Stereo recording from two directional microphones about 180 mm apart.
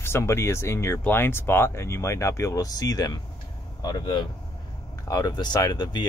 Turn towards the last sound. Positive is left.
turn(degrees=20)  # may be behind; listen again after turning